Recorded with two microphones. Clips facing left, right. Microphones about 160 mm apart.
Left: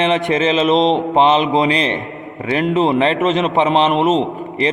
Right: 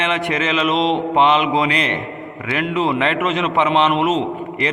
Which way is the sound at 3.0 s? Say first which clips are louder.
Left 4 dB; 30° left (ahead or behind).